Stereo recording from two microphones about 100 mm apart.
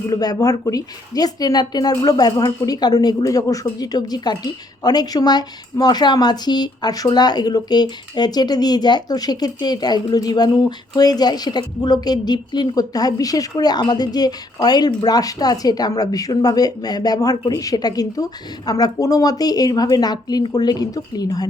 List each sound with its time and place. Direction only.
0.1 s speech: 40° left (ahead or behind)